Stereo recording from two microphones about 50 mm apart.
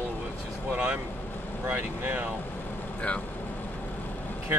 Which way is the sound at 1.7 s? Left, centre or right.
Right.